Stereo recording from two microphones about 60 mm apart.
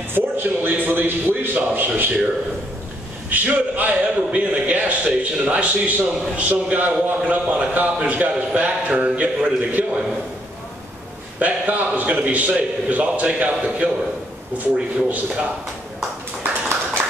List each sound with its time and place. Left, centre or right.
0.1 s a man's voice: right
3.3 s a man's voice: right
11.3 s a sound: right
12.3 s a man's voice: right